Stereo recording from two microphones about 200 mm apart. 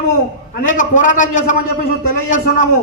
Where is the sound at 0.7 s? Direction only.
40° left (ahead or behind).